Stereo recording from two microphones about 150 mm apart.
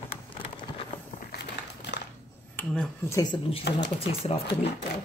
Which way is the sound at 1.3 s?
90° left.